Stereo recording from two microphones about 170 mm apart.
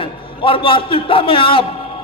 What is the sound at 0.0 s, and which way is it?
A man's voice, 30° left (ahead or behind).